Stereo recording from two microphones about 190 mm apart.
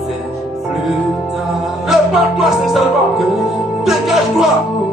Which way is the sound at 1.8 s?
Centre (ahead or behind).